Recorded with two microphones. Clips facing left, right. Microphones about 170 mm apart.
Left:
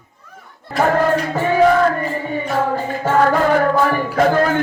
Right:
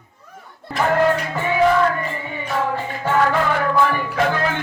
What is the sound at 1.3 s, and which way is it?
Music, 40° left (ahead or behind).